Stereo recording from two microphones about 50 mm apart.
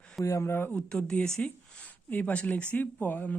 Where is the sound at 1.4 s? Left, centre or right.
Left.